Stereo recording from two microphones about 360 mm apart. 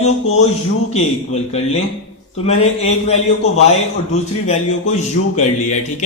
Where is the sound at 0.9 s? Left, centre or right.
Centre.